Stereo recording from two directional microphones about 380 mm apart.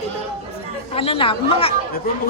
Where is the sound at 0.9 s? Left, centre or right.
Centre.